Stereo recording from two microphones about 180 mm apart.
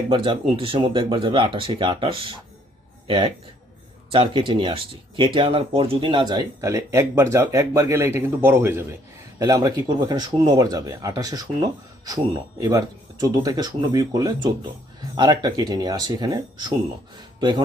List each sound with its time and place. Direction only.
0.1 s speech: 30° right (ahead or behind)